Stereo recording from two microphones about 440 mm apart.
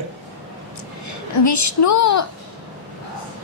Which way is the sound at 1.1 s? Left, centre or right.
Left.